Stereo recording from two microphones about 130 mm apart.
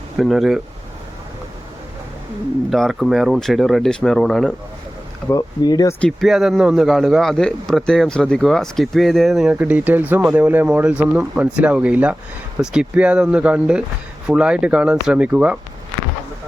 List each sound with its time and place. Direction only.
0.2 s a man's voice: centre (ahead or behind)
2.6 s a man's voice: centre (ahead or behind)
5.3 s speech: 30° left (ahead or behind)
6.0 s a man's voice: 5° left (ahead or behind)